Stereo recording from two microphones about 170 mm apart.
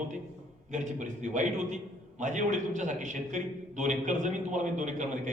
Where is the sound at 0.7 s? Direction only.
45° right (ahead or behind).